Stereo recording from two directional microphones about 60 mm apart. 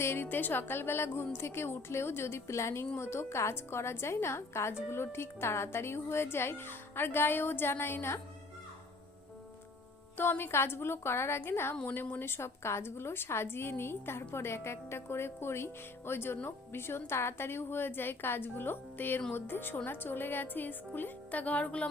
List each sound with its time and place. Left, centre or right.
0.0 s a woman's voice: left
10.2 s a woman's voice: left